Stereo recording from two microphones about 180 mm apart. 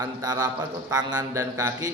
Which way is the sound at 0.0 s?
20° right (ahead or behind).